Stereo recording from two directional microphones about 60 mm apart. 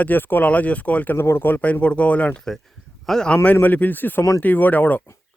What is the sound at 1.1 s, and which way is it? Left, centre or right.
A man's voice, left.